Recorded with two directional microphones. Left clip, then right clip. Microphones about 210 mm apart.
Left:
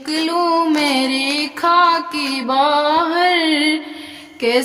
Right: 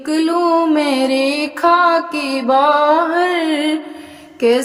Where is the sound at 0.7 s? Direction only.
35° right (ahead or behind).